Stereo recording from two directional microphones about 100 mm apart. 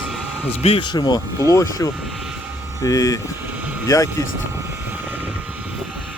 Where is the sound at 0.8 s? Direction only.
50° left (ahead or behind).